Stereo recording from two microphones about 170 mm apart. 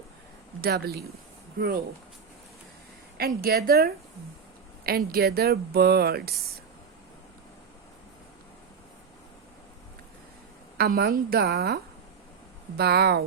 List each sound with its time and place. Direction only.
0.6 s a woman's voice: 65° right (ahead or behind)
3.2 s a woman's voice: 60° right (ahead or behind)
10.8 s speech: 70° right (ahead or behind)